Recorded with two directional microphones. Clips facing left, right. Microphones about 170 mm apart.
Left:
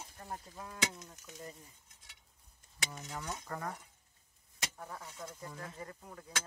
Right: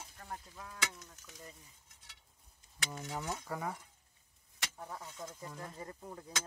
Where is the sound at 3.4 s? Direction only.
10° right (ahead or behind).